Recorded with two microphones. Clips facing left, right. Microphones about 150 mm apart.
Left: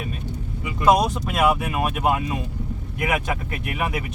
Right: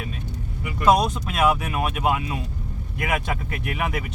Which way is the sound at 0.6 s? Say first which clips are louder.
Left 1 dB; 20° left (ahead or behind).